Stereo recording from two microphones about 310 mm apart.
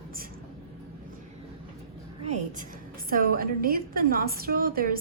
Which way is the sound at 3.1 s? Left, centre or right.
Right.